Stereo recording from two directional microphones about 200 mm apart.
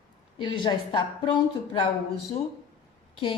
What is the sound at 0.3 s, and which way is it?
A woman's voice, 25° left (ahead or behind).